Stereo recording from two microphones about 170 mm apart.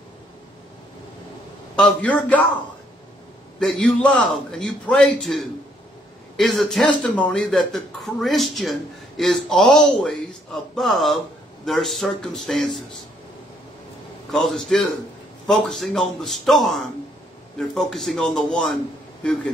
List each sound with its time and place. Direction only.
1.8 s a man's voice: 10° left (ahead or behind)
3.5 s a man's voice: 5° left (ahead or behind)
14.3 s a man's voice: centre (ahead or behind)